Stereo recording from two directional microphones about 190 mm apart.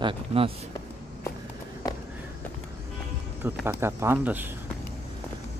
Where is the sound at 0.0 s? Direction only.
30° right (ahead or behind).